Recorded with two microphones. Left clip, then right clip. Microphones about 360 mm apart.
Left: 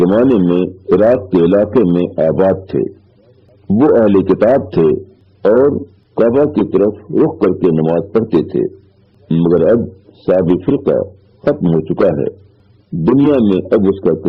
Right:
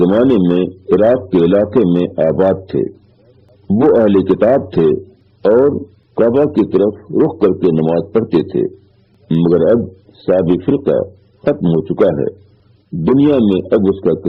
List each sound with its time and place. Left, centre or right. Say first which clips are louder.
0.0 s a man's voice: even; left